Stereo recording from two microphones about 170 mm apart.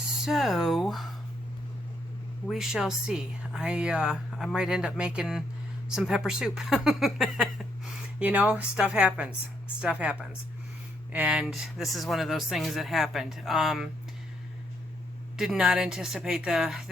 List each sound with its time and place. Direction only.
0.3 s speech: centre (ahead or behind)
2.5 s speech: centre (ahead or behind)
15.4 s speech: 5° right (ahead or behind)